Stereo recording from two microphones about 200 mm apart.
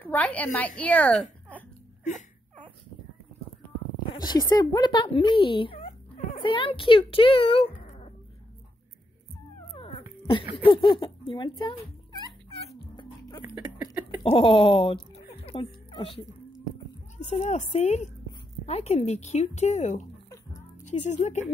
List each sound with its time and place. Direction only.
0.0 s a woman's voice: 10° left (ahead or behind)
4.3 s speech: 20° left (ahead or behind)
7.8 s dog: 35° left (ahead or behind)
10.6 s speech: 25° left (ahead or behind)
12.8 s dog: 25° left (ahead or behind)
14.2 s speech: 30° left (ahead or behind)